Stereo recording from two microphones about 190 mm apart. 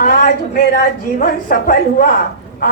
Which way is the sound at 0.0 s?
45° left (ahead or behind).